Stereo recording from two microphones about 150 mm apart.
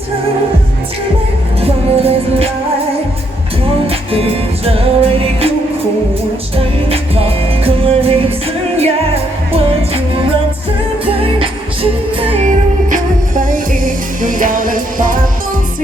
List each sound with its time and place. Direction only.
1.6 s music: 40° right (ahead or behind)
3.6 s music: 40° right (ahead or behind)
6.6 s music: 40° right (ahead or behind)
12.5 s music: 60° right (ahead or behind)